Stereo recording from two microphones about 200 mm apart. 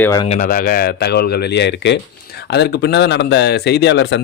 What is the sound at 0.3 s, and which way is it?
Speech, 40° left (ahead or behind).